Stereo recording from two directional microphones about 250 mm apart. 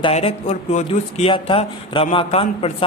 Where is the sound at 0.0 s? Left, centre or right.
Left.